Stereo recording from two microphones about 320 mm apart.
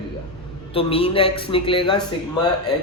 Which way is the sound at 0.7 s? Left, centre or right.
Centre.